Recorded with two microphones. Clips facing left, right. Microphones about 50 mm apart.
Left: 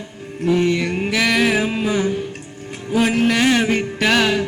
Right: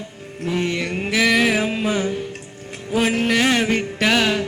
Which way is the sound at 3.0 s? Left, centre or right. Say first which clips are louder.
Left 2 dB; centre.